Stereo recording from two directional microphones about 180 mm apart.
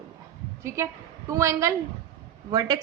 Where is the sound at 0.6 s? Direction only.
15° right (ahead or behind).